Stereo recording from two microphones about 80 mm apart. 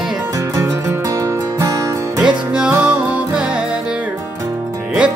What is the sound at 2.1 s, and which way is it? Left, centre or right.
Music, centre.